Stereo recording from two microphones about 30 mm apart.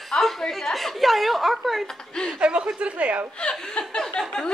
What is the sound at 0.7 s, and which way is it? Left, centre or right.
A woman's voice, centre.